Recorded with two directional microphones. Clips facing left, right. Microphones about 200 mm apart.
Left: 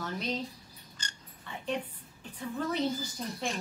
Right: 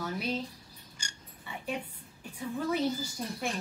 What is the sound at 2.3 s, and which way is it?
A woman's voice, 10° right (ahead or behind).